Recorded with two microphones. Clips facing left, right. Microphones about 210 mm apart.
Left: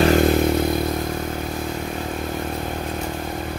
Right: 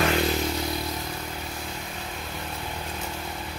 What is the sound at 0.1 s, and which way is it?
Vehicle, 55° left (ahead or behind).